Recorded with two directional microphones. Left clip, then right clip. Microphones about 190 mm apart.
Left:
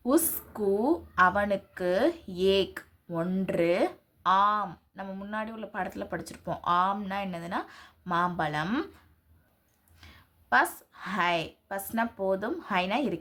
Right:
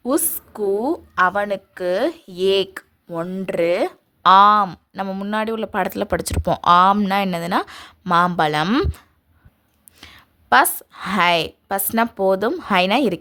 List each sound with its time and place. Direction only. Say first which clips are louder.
0.0 s a woman's voice: right 5 dB; 55° right (ahead or behind)